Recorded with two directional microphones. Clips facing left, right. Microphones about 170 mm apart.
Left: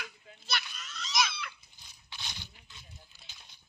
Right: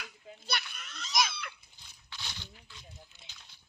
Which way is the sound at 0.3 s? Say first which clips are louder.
Even; 55° right (ahead or behind).